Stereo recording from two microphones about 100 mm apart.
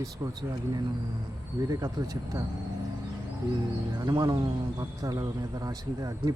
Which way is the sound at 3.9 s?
40° right (ahead or behind).